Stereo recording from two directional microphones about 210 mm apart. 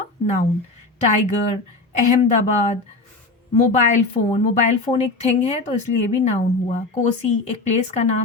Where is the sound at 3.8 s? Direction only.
35° left (ahead or behind).